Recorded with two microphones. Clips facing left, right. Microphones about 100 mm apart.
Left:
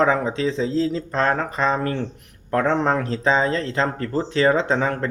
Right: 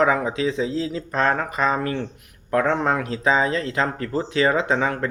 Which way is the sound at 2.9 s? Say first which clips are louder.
Left 1 dB; 35° left (ahead or behind).